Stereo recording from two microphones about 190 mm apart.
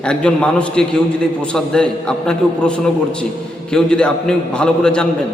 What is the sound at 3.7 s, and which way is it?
A man's voice, 5° left (ahead or behind).